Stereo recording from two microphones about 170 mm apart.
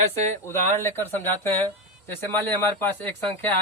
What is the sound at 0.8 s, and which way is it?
Speech, 15° left (ahead or behind).